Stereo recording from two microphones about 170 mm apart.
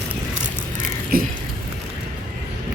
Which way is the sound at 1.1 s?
60° right (ahead or behind).